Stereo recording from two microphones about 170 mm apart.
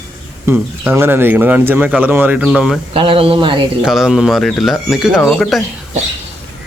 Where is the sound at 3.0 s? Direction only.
30° right (ahead or behind).